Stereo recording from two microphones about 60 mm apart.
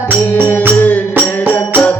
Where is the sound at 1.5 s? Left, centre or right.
Left.